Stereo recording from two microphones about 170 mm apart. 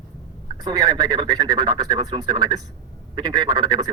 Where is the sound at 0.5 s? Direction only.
25° right (ahead or behind).